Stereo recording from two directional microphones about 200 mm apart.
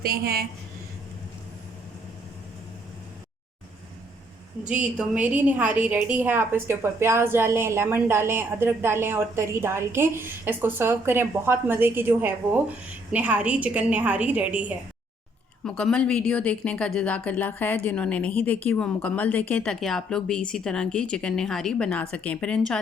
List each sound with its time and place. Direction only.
0.0 s a woman's voice: 50° right (ahead or behind)
4.7 s a woman's voice: 5° right (ahead or behind)
15.6 s a woman's voice: 5° left (ahead or behind)